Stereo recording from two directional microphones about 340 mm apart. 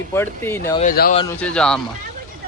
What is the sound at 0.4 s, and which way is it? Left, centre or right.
Speech, centre.